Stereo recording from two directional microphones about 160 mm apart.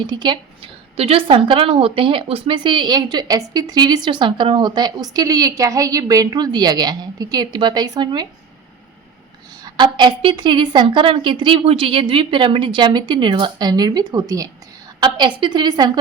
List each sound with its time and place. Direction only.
0.0 s a woman's voice: 30° right (ahead or behind)
9.6 s a woman's voice: 25° right (ahead or behind)